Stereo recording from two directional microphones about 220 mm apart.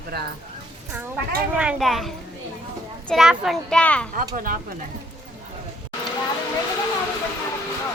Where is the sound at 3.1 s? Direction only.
Centre (ahead or behind).